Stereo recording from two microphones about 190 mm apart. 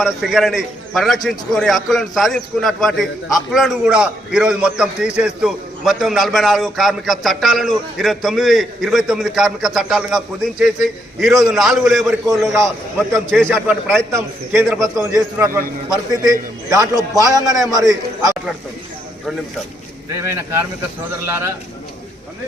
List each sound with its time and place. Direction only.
0.0 s a man's voice: centre (ahead or behind)
12.4 s a man's voice: 15° right (ahead or behind)
14.6 s a man's voice: centre (ahead or behind)
15.1 s a man's voice: 15° right (ahead or behind)
16.6 s a man's voice: 20° right (ahead or behind)
20.1 s a man's voice: 15° right (ahead or behind)